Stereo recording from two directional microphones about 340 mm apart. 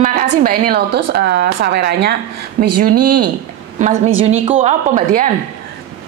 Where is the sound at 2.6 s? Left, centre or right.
Right.